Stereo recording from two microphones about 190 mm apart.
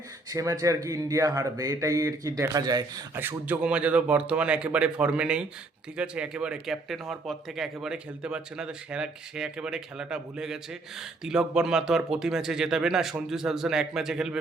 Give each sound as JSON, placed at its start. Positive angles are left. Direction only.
{"t": 0.3, "sound": "speech", "side_deg": -20}